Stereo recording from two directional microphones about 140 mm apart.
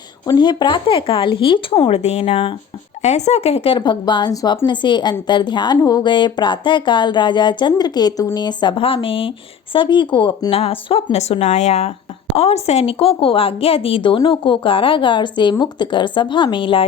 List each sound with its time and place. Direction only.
0.3 s speech: 30° left (ahead or behind)
2.0 s speech: 50° left (ahead or behind)
3.0 s speech: 55° left (ahead or behind); by 16.8 s 35° left (ahead or behind)